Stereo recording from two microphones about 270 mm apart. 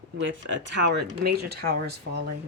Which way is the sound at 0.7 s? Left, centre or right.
Right.